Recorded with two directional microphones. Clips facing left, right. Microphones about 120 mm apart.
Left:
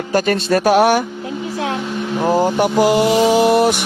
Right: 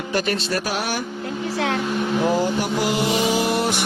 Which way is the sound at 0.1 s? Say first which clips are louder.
Left 8 dB; 45° left (ahead or behind).